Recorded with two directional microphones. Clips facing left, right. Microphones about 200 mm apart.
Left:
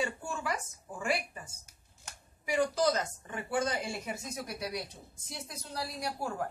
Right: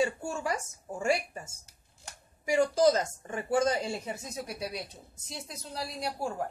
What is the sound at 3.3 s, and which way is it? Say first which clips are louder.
Speech: right 6 dB; 45° right (ahead or behind).